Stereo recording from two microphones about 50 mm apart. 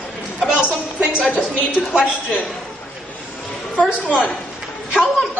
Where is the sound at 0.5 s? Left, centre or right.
Right.